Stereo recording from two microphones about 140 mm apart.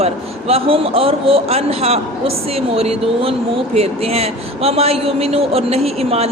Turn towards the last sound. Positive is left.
turn(degrees=-45)  # may be behind; listen again after turning